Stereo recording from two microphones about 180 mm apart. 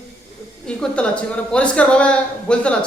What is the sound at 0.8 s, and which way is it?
A man's voice, 5° left (ahead or behind).